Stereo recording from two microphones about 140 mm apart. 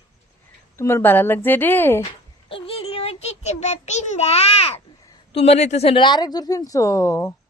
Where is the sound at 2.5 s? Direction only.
45° left (ahead or behind).